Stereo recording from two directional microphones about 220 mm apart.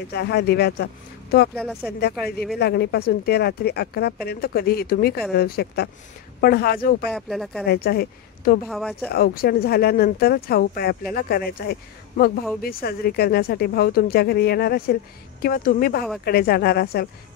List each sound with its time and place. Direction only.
0.1 s speech: 50° left (ahead or behind)
1.6 s speech: centre (ahead or behind)
1.9 s speech: 50° left (ahead or behind)
7.1 s speech: 5° left (ahead or behind)
7.6 s speech: 45° left (ahead or behind)
8.6 s speech: centre (ahead or behind)
9.1 s a woman's voice: 45° left (ahead or behind)